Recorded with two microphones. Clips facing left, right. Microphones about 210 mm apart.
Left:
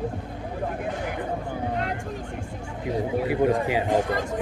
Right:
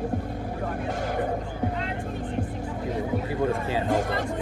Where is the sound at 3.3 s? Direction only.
15° left (ahead or behind).